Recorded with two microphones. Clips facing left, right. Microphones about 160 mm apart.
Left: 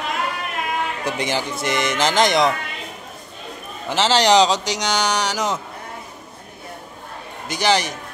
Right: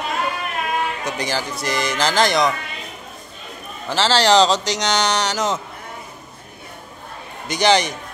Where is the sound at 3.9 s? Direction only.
15° left (ahead or behind).